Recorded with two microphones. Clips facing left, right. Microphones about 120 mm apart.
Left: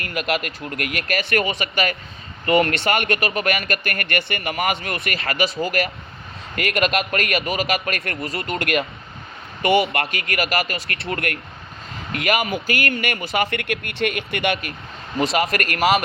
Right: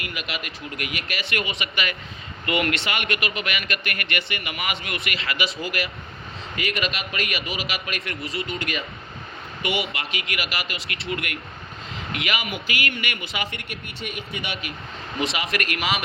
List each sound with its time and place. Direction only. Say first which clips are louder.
0.0 s a man's voice: left 9 dB; 45° left (ahead or behind)
9.6 s speech: left 9 dB; 5° right (ahead or behind)
9.9 s a man's voice: left 7 dB; 50° left (ahead or behind)
12.5 s speech: left 5 dB; 30° left (ahead or behind)
13.0 s a man's voice: left 8 dB; 45° left (ahead or behind)
13.6 s speech: left 11 dB; 75° left (ahead or behind)
15.2 s speech: left 5 dB; 30° left (ahead or behind)
15.5 s a man's voice: left 6 dB; 45° left (ahead or behind)